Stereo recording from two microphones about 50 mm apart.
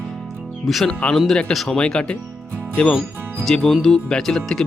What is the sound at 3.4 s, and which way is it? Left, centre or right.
Speech, centre.